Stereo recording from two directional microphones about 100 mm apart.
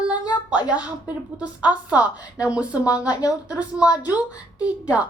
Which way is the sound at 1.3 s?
10° right (ahead or behind).